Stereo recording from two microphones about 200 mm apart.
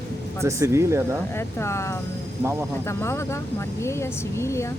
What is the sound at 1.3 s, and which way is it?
Speech, 15° left (ahead or behind).